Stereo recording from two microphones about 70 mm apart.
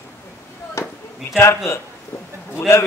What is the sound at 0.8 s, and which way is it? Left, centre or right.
Chop, left.